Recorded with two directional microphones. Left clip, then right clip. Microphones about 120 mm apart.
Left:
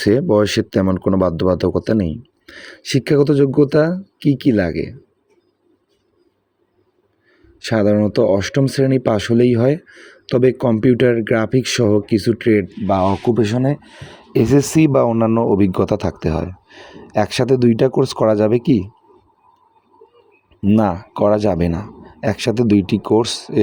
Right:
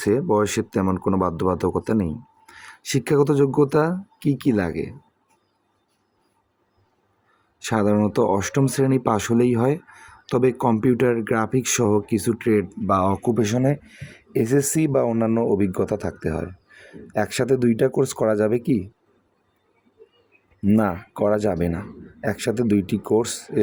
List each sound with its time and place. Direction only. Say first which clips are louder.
0.0 s speech: left 5 dB; 35° left (ahead or behind)
7.6 s speech: left 5 dB; 20° left (ahead or behind)
20.7 s speech: left 5 dB; 30° left (ahead or behind)